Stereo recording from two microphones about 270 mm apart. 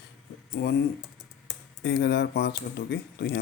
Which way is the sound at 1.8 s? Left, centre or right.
Left.